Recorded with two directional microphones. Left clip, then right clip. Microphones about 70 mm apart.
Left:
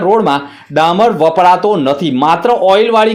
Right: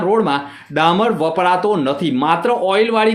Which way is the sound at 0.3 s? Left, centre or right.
Left.